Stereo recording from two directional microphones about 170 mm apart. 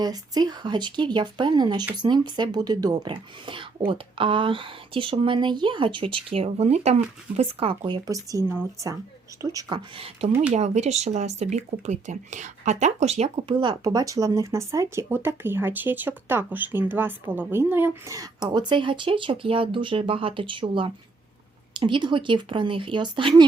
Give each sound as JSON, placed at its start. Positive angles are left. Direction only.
{"t": 0.0, "sound": "speech", "side_deg": -25}
{"t": 13.6, "sound": "speech", "side_deg": -25}